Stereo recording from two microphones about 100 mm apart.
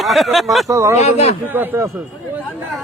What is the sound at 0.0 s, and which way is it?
Speech, centre (ahead or behind).